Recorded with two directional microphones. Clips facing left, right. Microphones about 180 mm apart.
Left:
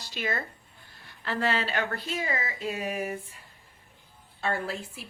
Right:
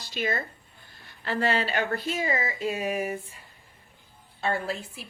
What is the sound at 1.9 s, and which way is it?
Speech, 20° right (ahead or behind).